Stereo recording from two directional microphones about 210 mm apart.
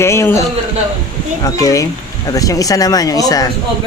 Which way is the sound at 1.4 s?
15° left (ahead or behind).